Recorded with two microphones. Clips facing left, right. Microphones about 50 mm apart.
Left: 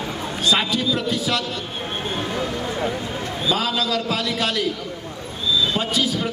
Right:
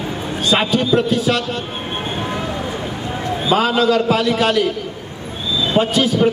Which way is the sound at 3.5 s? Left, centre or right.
Right.